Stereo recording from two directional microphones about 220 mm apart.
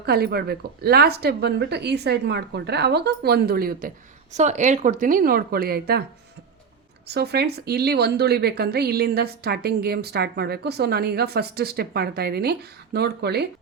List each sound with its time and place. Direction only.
0.0 s speech: 45° right (ahead or behind)
7.1 s speech: 45° right (ahead or behind)